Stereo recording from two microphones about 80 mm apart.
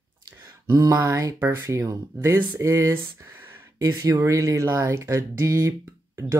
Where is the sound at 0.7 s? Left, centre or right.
Right.